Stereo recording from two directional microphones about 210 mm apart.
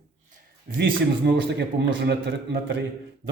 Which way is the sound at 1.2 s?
50° right (ahead or behind).